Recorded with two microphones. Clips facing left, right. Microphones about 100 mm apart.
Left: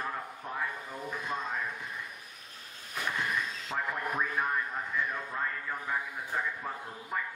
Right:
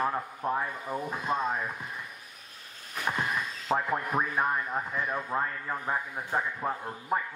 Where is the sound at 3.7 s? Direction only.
50° right (ahead or behind).